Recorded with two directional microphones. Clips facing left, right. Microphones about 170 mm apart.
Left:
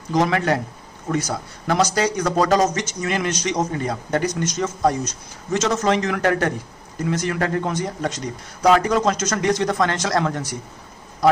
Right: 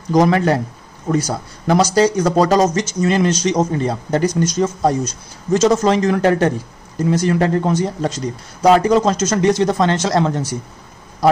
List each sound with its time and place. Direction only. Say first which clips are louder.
0.1 s speech: right 5 dB; 35° right (ahead or behind)